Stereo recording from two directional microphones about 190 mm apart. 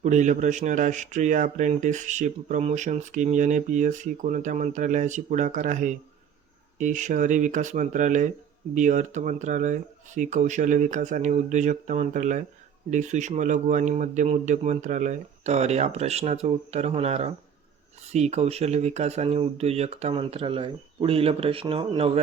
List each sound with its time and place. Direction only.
0.0 s speech: 40° right (ahead or behind)